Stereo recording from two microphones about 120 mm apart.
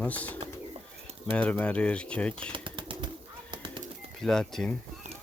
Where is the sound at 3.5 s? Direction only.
40° right (ahead or behind).